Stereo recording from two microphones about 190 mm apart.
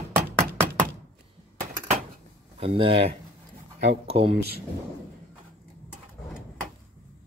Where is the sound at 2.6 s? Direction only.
30° right (ahead or behind).